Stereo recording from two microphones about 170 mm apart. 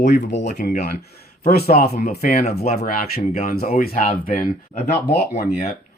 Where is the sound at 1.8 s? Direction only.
70° left (ahead or behind).